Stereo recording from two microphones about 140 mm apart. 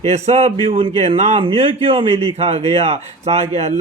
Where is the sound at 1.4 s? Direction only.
40° right (ahead or behind).